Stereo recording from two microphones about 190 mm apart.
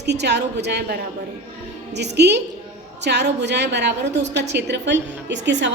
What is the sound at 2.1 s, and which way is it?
A woman's voice, 60° right (ahead or behind).